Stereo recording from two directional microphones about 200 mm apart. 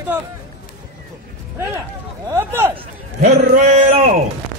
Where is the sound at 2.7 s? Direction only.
30° right (ahead or behind).